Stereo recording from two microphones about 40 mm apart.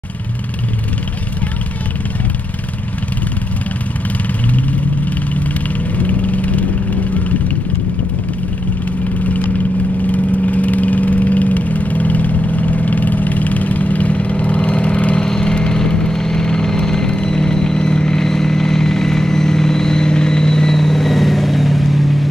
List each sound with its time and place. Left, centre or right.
4.5 s vehicle: left
10.1 s vehicle: left
15.1 s vehicle: centre